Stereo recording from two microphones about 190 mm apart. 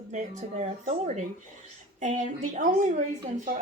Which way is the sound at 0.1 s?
40° right (ahead or behind).